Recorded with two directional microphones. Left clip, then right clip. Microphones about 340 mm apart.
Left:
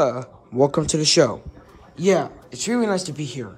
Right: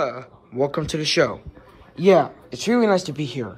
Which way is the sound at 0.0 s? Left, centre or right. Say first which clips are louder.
Left 5 dB; centre.